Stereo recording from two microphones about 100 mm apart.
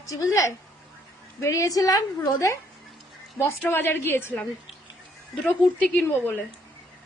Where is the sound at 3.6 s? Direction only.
20° left (ahead or behind).